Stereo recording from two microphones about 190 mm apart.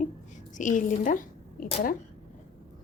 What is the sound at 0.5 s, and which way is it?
A woman's voice, 40° left (ahead or behind).